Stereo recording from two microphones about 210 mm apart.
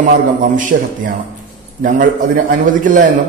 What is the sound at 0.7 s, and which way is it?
A man's voice, 45° right (ahead or behind).